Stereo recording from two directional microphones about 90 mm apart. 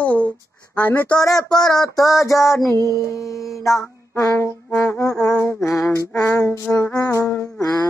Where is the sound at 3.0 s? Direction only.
35° left (ahead or behind).